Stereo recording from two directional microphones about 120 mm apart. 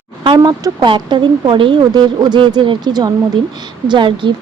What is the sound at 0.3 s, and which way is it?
Speech, 30° right (ahead or behind).